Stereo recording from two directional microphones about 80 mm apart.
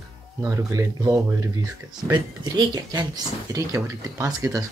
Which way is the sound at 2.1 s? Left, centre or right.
Right.